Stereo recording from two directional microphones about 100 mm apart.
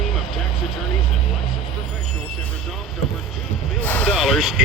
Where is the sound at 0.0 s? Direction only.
Centre (ahead or behind).